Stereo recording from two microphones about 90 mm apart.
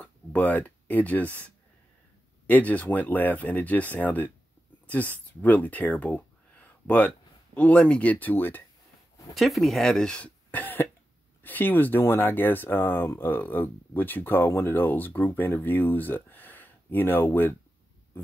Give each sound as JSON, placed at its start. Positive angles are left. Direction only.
{"t": 0.0, "sound": "speech", "side_deg": 15}
{"t": 9.3, "sound": "speech", "side_deg": 0}